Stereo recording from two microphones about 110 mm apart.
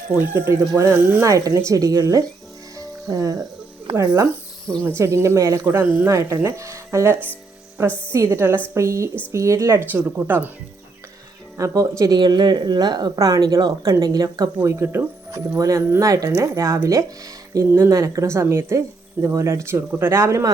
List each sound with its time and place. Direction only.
0.6 s speech: 30° right (ahead or behind)
0.9 s speech: 20° right (ahead or behind)
2.7 s music: 30° right (ahead or behind)
3.9 s speech: 30° right (ahead or behind)
4.7 s speech: 10° left (ahead or behind)
4.9 s speech: 25° right (ahead or behind)
11.5 s speech: 30° right (ahead or behind)